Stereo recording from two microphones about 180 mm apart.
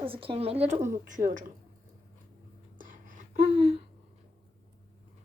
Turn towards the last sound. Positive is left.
turn(degrees=-35)  # may be behind; listen again after turning